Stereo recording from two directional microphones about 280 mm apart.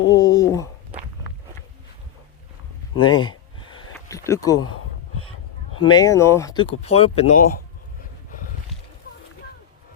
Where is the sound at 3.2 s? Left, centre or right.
Centre.